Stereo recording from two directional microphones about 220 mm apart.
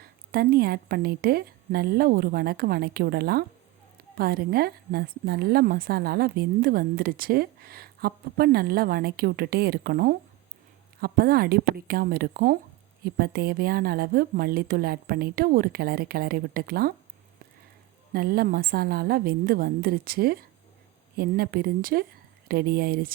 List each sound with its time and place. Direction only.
0.0 s a woman's voice: 45° right (ahead or behind)
18.1 s a woman's voice: 45° right (ahead or behind)